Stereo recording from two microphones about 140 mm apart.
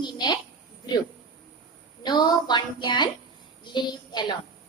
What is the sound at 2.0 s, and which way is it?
A woman's voice, 30° left (ahead or behind).